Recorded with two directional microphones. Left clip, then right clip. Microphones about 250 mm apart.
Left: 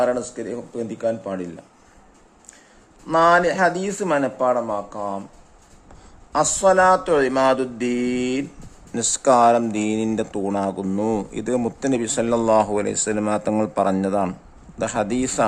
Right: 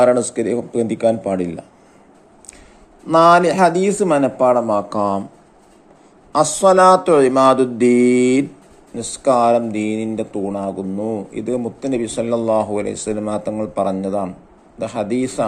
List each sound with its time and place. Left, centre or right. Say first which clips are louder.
0.0 s speech: right 8 dB; centre
3.1 s speech: right 5 dB; centre
4.9 s speech: right 9 dB; centre
6.3 s speech: right 4 dB; centre
9.0 s speech: even; centre
10.9 s a man's voice: even; left
11.3 s speech: right 1 dB; centre